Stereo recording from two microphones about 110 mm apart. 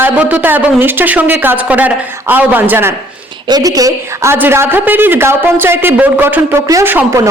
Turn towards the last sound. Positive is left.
turn(degrees=-25)  # may be behind; listen again after turning